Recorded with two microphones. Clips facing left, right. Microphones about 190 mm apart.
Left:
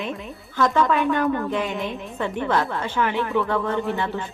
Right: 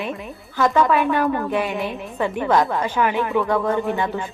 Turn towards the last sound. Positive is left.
turn(degrees=-15)  # may be behind; listen again after turning